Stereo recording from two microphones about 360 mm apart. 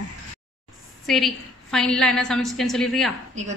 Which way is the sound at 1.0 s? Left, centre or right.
Centre.